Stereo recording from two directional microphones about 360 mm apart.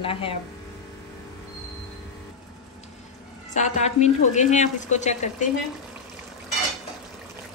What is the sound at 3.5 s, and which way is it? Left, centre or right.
A woman's voice, centre.